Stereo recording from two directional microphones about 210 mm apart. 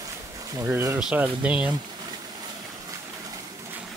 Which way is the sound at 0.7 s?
10° right (ahead or behind).